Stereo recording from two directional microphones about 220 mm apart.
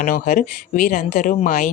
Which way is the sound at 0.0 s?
35° left (ahead or behind).